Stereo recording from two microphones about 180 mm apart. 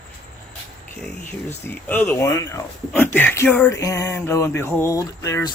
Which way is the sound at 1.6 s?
10° left (ahead or behind).